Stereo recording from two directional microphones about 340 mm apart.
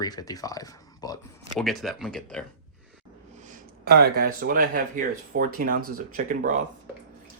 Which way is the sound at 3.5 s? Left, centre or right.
Right.